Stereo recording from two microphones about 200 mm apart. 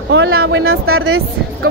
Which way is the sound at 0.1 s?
60° right (ahead or behind).